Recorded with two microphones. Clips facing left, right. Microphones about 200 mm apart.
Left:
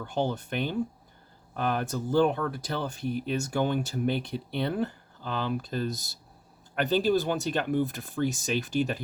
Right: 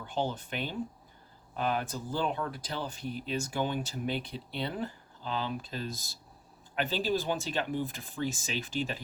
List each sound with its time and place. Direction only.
0.1 s speech: 65° left (ahead or behind); by 9.0 s 50° left (ahead or behind)